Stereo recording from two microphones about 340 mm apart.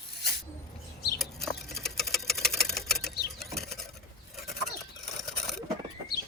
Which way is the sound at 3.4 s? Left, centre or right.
Centre.